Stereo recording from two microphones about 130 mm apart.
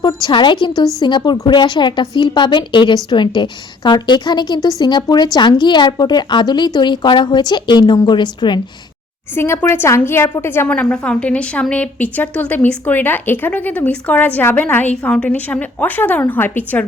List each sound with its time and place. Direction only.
0.0 s a woman's voice: 35° left (ahead or behind)
9.3 s a woman's voice: 15° left (ahead or behind)